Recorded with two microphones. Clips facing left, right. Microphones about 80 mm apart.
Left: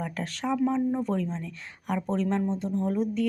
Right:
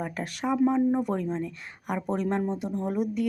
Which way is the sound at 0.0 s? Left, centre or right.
Centre.